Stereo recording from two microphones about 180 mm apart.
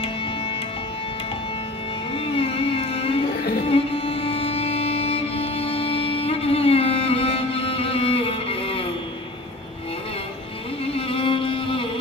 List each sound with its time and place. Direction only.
2.1 s music: 30° left (ahead or behind)
11.0 s music: 30° left (ahead or behind)